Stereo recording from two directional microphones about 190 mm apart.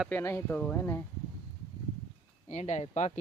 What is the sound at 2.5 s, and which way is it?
Speech, 40° left (ahead or behind).